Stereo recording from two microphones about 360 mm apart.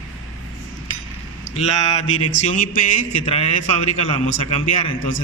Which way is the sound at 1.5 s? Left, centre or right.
Centre.